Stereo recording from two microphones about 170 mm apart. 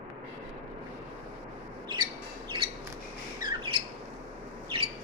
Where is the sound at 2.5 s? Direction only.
30° right (ahead or behind).